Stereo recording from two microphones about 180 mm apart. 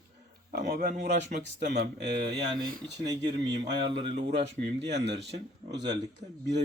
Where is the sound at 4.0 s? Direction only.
70° right (ahead or behind).